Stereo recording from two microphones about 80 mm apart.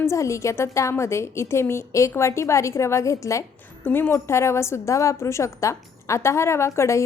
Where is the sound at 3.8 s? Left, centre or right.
Left.